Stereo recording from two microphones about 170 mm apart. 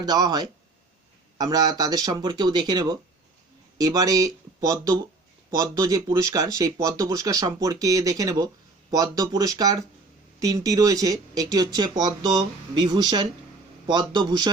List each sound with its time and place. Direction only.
0.0 s speech: 25° right (ahead or behind)